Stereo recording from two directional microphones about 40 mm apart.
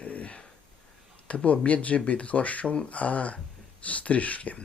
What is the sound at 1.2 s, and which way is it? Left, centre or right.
Speech, left.